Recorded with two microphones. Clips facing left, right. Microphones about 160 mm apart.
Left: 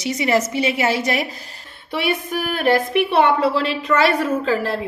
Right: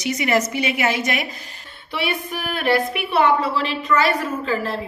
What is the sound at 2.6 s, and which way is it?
Speech, 45° left (ahead or behind).